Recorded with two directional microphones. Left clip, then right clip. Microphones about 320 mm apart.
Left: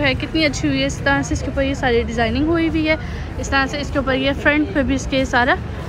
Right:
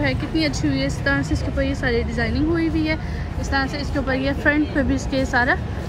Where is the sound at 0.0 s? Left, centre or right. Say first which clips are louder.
Left 4 dB; centre.